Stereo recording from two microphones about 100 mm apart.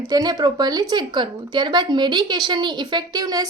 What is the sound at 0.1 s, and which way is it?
Speech, 40° right (ahead or behind).